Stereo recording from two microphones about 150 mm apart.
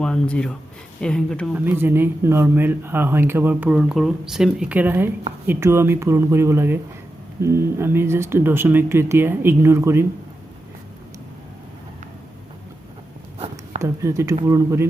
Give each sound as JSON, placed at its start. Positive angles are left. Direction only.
{"t": 0.0, "sound": "speech", "side_deg": 5}
{"t": 1.5, "sound": "speech", "side_deg": -15}
{"t": 13.8, "sound": "speech", "side_deg": -20}